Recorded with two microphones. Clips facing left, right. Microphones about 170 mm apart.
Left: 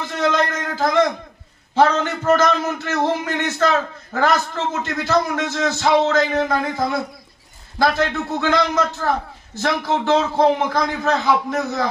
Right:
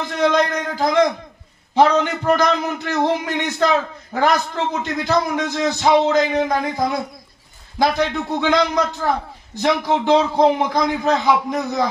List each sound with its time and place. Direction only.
0.2 s a man's voice: 15° right (ahead or behind)